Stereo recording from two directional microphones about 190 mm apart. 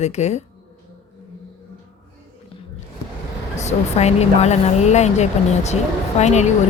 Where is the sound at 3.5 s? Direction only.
35° left (ahead or behind).